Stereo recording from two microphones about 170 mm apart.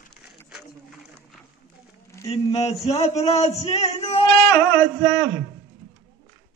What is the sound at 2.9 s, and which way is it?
Speech, 40° left (ahead or behind).